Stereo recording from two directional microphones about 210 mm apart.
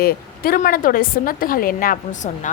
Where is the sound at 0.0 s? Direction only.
45° left (ahead or behind).